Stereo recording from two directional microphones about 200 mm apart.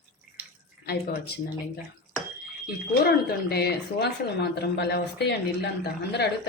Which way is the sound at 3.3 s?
50° left (ahead or behind).